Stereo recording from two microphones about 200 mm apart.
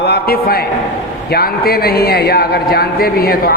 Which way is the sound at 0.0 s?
50° left (ahead or behind).